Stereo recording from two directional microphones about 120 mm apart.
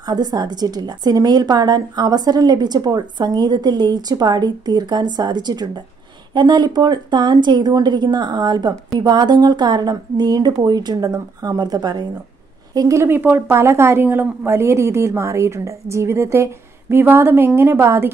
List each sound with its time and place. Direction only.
0.0 s a woman's voice: 35° right (ahead or behind)